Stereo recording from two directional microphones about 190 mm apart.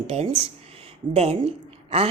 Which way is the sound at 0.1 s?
30° right (ahead or behind).